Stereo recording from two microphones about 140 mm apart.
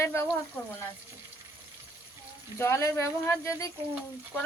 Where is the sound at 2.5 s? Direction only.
20° left (ahead or behind).